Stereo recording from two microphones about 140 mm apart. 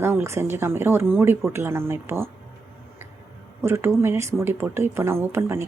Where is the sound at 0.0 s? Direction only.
15° right (ahead or behind).